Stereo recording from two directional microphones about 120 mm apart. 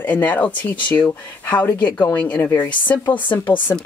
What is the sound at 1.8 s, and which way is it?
Speech, 35° left (ahead or behind).